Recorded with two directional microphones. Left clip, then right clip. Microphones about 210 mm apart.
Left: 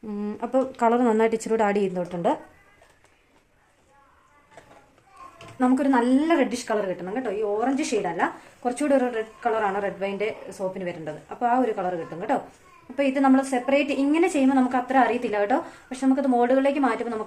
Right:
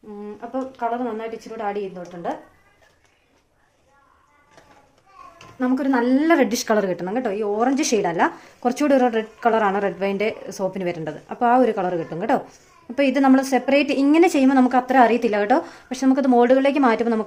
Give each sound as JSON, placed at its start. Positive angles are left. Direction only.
{"t": 0.2, "sound": "a sound", "side_deg": 55}
{"t": 0.8, "sound": "a woman's voice", "side_deg": 55}
{"t": 5.5, "sound": "a woman's voice", "side_deg": 10}
{"t": 5.8, "sound": "a woman's voice", "side_deg": -5}
{"t": 6.1, "sound": "a woman's voice", "side_deg": -30}